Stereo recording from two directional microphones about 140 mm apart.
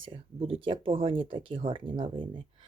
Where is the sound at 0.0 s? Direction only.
40° right (ahead or behind).